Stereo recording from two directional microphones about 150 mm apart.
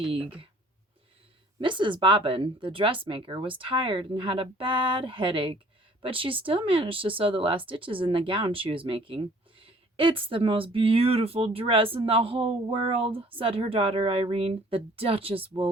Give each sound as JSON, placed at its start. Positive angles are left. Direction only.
{"t": 0.1, "sound": "speech", "side_deg": -35}
{"t": 1.5, "sound": "speech", "side_deg": -35}